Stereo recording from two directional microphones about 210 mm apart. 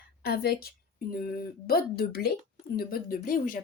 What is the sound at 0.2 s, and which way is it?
A woman's voice, 50° left (ahead or behind).